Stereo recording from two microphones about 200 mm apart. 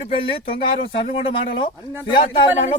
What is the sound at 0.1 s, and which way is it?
Speech, 25° left (ahead or behind).